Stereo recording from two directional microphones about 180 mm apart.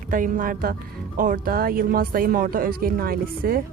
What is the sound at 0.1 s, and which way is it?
Speech, 50° right (ahead or behind).